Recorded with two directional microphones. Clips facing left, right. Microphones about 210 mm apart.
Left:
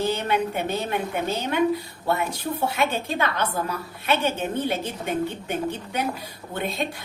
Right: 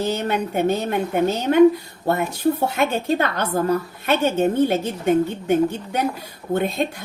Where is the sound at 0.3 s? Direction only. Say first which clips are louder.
Right 4 dB; 45° right (ahead or behind).